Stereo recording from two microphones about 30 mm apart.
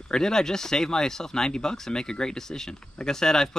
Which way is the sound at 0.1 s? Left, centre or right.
Left.